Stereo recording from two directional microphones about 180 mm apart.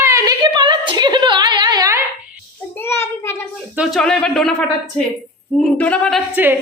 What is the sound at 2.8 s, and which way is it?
Child singing, 15° left (ahead or behind).